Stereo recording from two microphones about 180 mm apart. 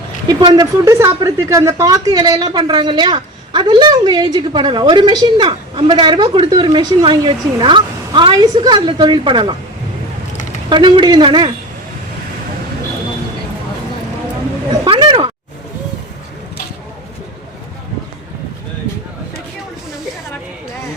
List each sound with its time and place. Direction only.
0.4 s a woman's voice: 20° right (ahead or behind)
10.7 s a woman's voice: 25° right (ahead or behind)
14.8 s a sound: 30° right (ahead or behind)